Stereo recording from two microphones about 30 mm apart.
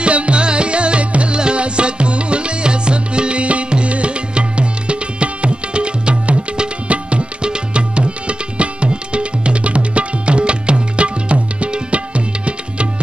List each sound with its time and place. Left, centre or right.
0.0 s music: right